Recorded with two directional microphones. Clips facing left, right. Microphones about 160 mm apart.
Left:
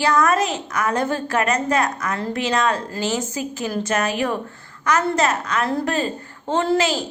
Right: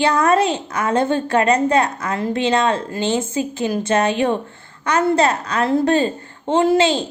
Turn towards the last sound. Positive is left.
turn(degrees=-30)  # may be behind; listen again after turning